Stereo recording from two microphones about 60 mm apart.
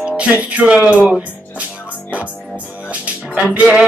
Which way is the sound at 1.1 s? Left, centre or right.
Right.